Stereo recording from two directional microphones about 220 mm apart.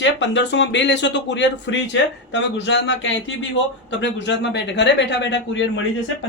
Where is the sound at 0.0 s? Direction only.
55° left (ahead or behind).